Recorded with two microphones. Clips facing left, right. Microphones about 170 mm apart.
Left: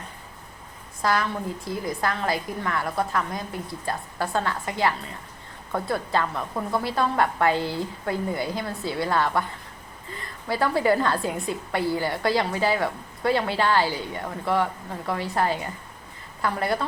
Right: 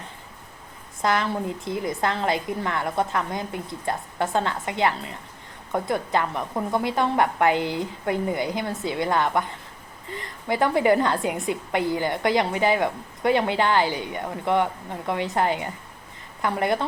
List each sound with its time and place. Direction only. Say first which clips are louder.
1.0 s a woman's voice: right 1 dB; 25° right (ahead or behind)